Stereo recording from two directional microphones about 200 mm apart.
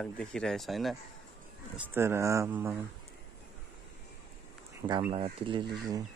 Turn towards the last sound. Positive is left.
turn(degrees=-25)  # may be behind; listen again after turning